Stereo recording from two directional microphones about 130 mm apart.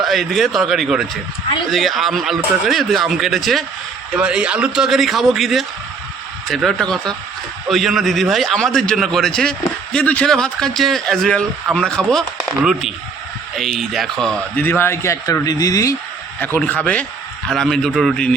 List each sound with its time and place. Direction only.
0.0 s a man's voice: centre (ahead or behind)
14.6 s a man's voice: 15° left (ahead or behind)
16.4 s a man's voice: 15° left (ahead or behind)